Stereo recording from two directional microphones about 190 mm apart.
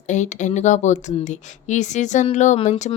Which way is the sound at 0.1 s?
40° left (ahead or behind).